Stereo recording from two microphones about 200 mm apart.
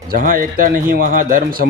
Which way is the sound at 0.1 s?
45° right (ahead or behind).